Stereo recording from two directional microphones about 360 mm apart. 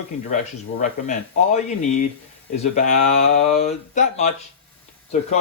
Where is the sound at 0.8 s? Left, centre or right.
Centre.